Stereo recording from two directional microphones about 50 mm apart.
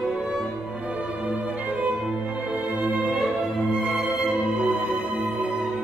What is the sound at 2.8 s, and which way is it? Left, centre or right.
Music, right.